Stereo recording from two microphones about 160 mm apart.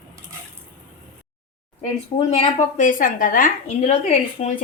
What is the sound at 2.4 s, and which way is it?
A woman's voice, 50° left (ahead or behind).